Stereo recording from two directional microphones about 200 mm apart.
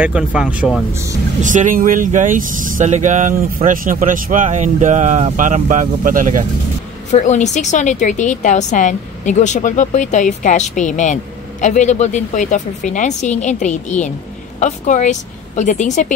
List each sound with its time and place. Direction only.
0.0 s speech: 5° right (ahead or behind)
1.4 s speech: 40° right (ahead or behind)
7.1 s a woman's voice: 35° left (ahead or behind)